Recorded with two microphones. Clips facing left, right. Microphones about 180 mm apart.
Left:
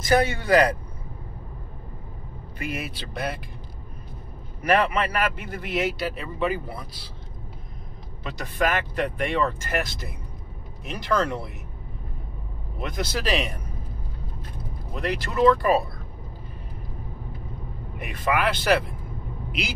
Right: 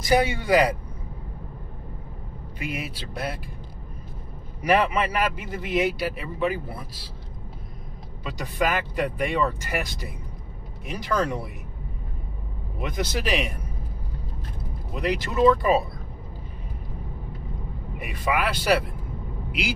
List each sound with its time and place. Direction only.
0.0 s speech: 10° right (ahead or behind)
2.8 s speech: centre (ahead or behind)
4.6 s speech: 15° right (ahead or behind)
8.4 s speech: 15° right (ahead or behind)
12.7 s speech: 15° right (ahead or behind)
15.0 s speech: 15° right (ahead or behind)
18.0 s speech: 10° right (ahead or behind)